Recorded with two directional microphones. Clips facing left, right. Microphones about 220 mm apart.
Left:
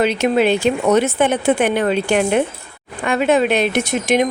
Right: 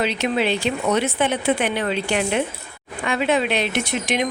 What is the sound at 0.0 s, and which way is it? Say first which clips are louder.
A woman's voice: left 6 dB; 50° left (ahead or behind).